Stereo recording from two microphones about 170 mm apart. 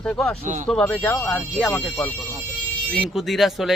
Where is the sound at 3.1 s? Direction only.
Centre (ahead or behind).